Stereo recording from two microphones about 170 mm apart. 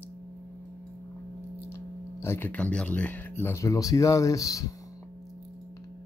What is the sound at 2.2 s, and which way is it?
Speech, 10° left (ahead or behind).